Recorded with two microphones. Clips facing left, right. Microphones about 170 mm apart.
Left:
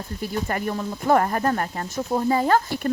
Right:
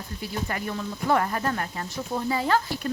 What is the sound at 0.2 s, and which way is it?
Speech, 45° left (ahead or behind).